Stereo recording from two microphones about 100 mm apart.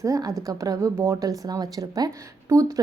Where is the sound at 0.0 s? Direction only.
35° right (ahead or behind).